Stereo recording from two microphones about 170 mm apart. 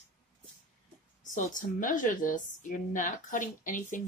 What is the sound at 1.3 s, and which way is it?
A woman's voice, 50° left (ahead or behind).